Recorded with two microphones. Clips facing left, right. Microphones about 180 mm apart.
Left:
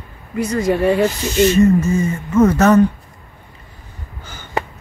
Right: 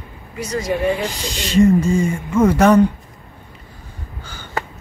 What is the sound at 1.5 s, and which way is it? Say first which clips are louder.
Speech: right 5 dB; 10° right (ahead or behind).